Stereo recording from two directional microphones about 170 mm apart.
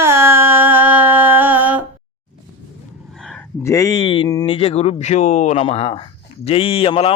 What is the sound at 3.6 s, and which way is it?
A man's voice, 15° left (ahead or behind).